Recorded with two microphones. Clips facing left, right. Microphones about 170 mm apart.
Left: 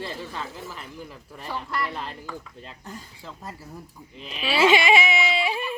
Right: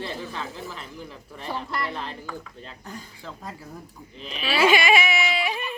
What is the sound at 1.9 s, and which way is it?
Speech, centre (ahead or behind).